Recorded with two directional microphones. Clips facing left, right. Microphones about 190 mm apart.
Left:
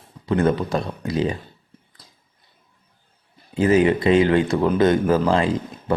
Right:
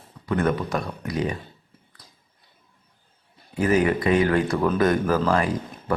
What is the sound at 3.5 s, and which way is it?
Speech, 25° left (ahead or behind).